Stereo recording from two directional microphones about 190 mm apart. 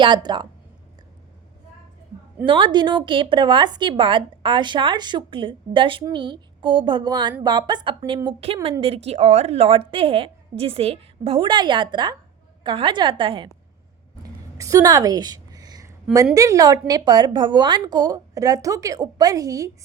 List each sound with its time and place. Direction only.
0.0 s a woman's voice: 25° right (ahead or behind)
2.5 s a woman's voice: 25° right (ahead or behind)
14.6 s a sound: 15° right (ahead or behind)
16.3 s a woman's voice: 15° right (ahead or behind)